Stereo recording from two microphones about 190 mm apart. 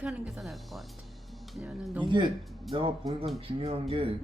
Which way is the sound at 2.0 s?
25° right (ahead or behind).